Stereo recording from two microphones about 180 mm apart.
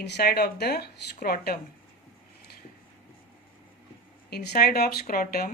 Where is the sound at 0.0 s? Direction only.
65° left (ahead or behind).